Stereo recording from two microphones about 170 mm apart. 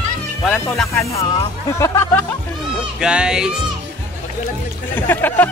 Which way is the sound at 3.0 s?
5° right (ahead or behind).